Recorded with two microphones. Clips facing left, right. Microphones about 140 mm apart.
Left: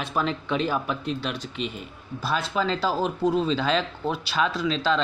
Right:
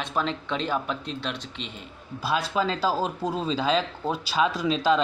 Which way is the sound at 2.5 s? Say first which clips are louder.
Even; 20° right (ahead or behind).